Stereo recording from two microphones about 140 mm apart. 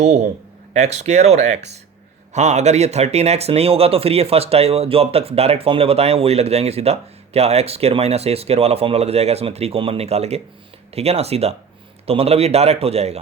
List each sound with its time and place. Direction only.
0.7 s speech: 55° right (ahead or behind)